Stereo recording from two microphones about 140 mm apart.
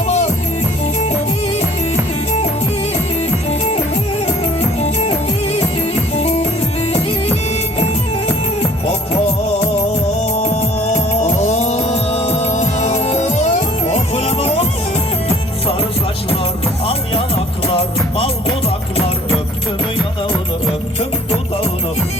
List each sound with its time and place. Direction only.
3.5 s music: 50° left (ahead or behind)
7.8 s music: 50° left (ahead or behind)
16.8 s music: 45° left (ahead or behind)